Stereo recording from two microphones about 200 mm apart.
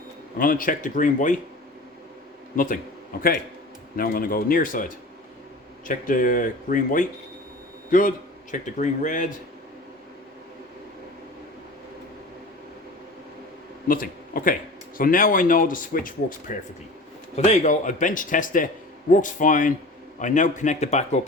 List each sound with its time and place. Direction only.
0.3 s speech: 45° left (ahead or behind)
3.9 s a man's voice: 45° left (ahead or behind)
5.9 s a man's voice: 40° left (ahead or behind)
13.8 s a man's voice: 45° left (ahead or behind)